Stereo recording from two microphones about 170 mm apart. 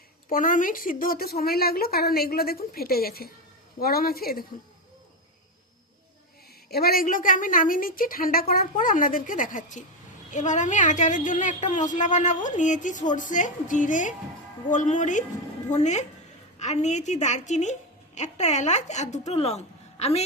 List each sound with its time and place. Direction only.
0.3 s speech: 55° left (ahead or behind)
6.7 s a woman's voice: 65° left (ahead or behind); by 20.2 s 40° left (ahead or behind)